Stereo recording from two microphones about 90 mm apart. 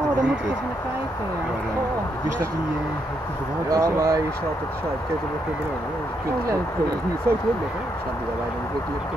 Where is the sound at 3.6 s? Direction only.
40° right (ahead or behind).